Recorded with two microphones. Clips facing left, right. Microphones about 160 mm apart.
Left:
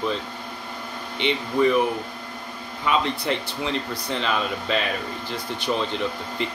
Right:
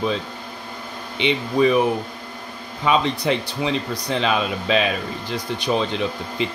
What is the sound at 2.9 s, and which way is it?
Speech, 15° right (ahead or behind).